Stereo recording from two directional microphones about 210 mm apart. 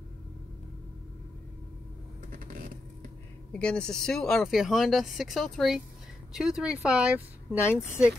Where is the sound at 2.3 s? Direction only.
40° right (ahead or behind).